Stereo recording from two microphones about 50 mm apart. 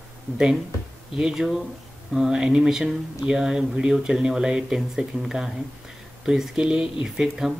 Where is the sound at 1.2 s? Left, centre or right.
Centre.